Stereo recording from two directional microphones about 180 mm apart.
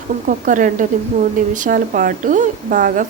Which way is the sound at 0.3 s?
45° right (ahead or behind).